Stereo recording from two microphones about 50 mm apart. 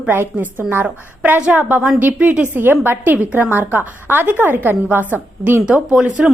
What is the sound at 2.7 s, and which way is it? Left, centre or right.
Speech, right.